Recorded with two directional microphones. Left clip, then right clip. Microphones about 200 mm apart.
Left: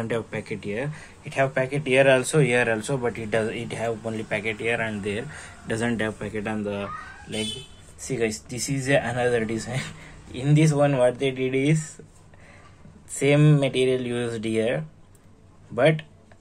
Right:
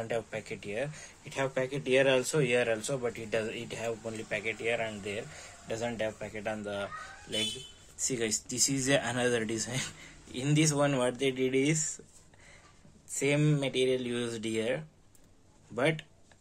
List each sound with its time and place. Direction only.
0.0 s speech: 10° right (ahead or behind)
8.0 s speech: 15° right (ahead or behind)
13.1 s speech: centre (ahead or behind)